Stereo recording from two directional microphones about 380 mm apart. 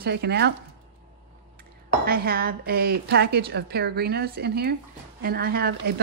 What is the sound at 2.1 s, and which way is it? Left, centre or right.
Speech, right.